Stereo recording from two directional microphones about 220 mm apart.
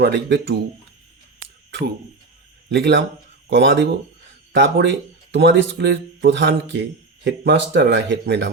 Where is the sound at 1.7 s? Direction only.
50° right (ahead or behind).